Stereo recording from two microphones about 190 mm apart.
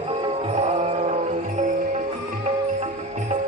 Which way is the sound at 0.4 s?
35° right (ahead or behind).